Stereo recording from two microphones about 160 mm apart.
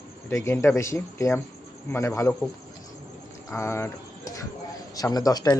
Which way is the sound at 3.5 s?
15° left (ahead or behind).